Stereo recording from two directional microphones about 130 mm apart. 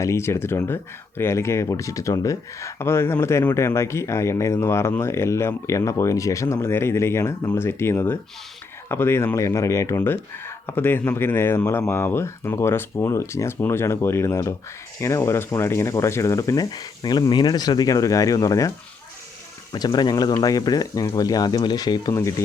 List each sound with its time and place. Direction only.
0.0 s speech: 20° left (ahead or behind)
19.7 s speech: 35° left (ahead or behind)